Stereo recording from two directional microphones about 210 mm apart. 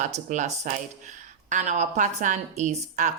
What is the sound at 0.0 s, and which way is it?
A woman's voice, 35° right (ahead or behind).